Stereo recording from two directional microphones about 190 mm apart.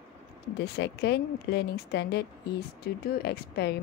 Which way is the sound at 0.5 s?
60° left (ahead or behind).